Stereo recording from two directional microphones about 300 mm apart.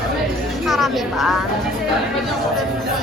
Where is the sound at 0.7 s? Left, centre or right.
Centre.